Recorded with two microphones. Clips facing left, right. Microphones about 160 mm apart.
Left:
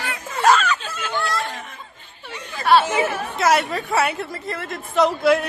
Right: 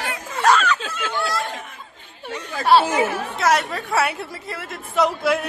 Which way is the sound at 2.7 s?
30° right (ahead or behind).